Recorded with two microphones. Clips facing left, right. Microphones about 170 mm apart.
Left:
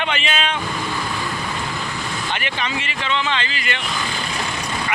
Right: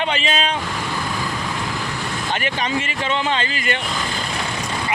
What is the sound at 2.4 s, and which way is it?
Speech, 45° right (ahead or behind).